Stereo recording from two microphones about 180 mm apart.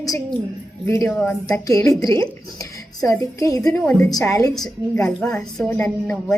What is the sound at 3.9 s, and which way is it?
A woman's voice, 10° left (ahead or behind).